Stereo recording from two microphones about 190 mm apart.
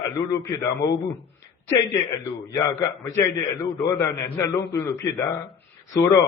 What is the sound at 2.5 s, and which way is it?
A man's voice, 15° left (ahead or behind).